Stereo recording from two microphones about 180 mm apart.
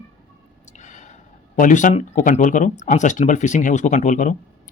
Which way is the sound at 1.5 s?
45° left (ahead or behind).